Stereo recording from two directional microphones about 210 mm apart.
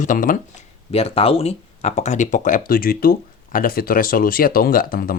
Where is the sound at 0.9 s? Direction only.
30° left (ahead or behind).